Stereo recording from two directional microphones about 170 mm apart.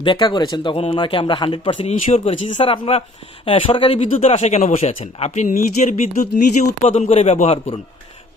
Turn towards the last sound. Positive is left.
turn(degrees=40)  # may be behind; listen again after turning